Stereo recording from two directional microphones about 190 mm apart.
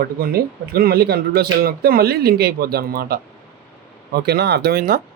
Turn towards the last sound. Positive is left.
turn(degrees=-50)  # may be behind; listen again after turning